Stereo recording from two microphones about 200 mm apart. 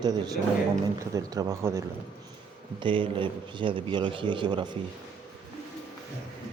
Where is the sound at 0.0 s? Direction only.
20° right (ahead or behind).